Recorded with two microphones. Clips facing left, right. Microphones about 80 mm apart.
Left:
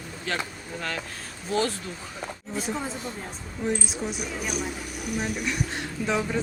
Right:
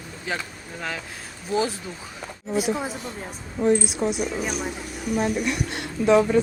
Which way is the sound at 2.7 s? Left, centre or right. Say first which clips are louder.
Right 3 dB; centre.